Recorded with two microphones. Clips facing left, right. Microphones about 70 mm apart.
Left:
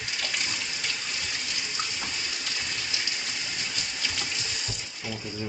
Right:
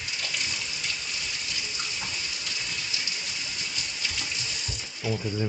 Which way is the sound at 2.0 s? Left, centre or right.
Left.